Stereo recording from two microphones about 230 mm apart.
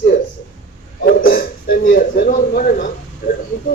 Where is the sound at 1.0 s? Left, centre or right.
Left.